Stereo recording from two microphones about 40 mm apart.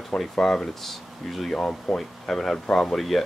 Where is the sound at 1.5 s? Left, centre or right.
Left.